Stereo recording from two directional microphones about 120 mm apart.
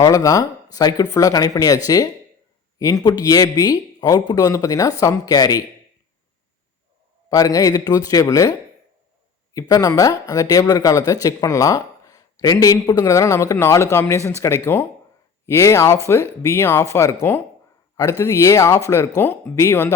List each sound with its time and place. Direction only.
0.0 s speech: 30° left (ahead or behind)
7.3 s speech: 30° left (ahead or behind)